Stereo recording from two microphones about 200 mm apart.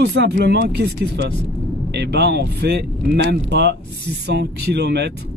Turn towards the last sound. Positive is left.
turn(degrees=-55)  # may be behind; listen again after turning